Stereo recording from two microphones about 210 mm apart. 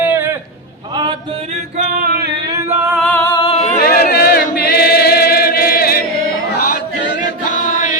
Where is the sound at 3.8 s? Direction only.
45° left (ahead or behind).